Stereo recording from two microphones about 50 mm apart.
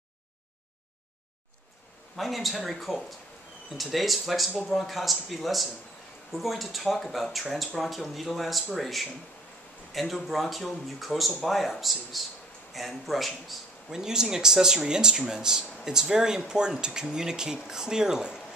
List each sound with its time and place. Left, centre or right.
2.1 s speech: centre
13.8 s speech: centre